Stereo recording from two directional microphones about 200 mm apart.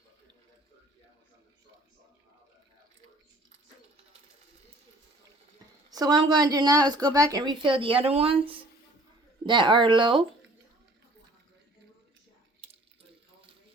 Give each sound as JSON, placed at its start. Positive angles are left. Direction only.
{"t": 5.9, "sound": "a woman's voice", "side_deg": -20}